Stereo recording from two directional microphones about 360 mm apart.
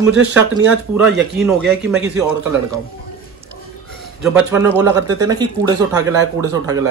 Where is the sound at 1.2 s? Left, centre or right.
Centre.